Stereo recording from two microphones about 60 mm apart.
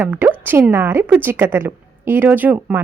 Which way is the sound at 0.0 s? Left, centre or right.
Right.